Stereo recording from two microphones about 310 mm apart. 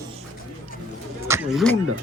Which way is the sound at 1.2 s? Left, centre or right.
Centre.